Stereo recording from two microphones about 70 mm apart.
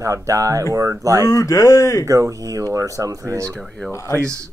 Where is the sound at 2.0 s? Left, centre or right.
Right.